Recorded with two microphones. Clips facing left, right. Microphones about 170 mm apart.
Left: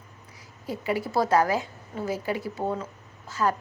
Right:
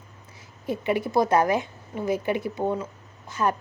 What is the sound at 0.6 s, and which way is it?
A woman's voice, 20° right (ahead or behind).